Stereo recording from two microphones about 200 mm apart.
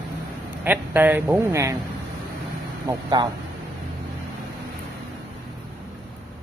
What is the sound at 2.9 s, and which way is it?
Speech, 20° right (ahead or behind).